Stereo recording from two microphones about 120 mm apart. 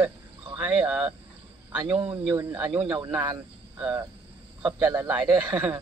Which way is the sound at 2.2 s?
20° right (ahead or behind).